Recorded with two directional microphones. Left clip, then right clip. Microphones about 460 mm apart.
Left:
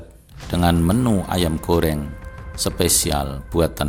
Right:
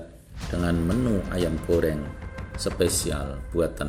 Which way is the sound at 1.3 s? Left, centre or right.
Centre.